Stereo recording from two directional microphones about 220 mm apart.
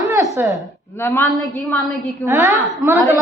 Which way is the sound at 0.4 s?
10° right (ahead or behind).